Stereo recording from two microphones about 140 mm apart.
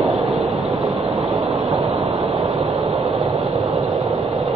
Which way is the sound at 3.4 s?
35° right (ahead or behind).